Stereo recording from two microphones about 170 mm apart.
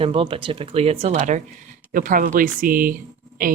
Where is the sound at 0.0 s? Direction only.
30° right (ahead or behind).